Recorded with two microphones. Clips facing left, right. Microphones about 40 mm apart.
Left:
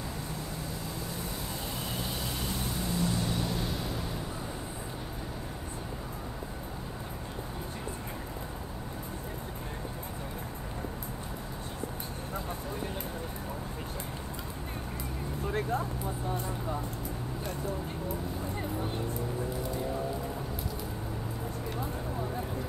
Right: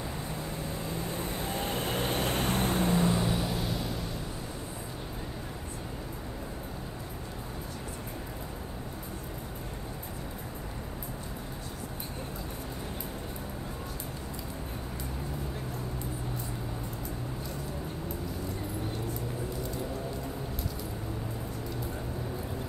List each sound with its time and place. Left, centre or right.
0.8 s vehicle: right
3.2 s vehicle: centre